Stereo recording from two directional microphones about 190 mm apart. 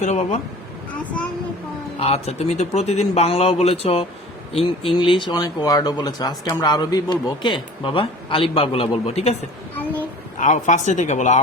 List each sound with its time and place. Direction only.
0.0 s speech: 35° left (ahead or behind)
2.0 s speech: 30° left (ahead or behind)
9.7 s a sound: 10° left (ahead or behind)
10.3 s speech: 40° left (ahead or behind)